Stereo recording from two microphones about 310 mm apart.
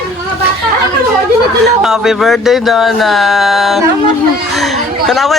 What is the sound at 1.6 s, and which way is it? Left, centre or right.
Speech, centre.